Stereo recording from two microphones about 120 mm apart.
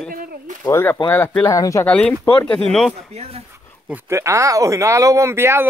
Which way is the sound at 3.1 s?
60° right (ahead or behind).